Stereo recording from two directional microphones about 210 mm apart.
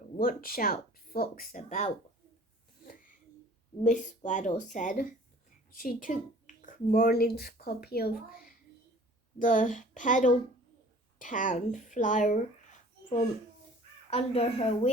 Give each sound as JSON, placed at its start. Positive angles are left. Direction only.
{"t": 0.2, "sound": "speech", "side_deg": 45}
{"t": 3.8, "sound": "speech", "side_deg": 35}
{"t": 14.1, "sound": "speech", "side_deg": 30}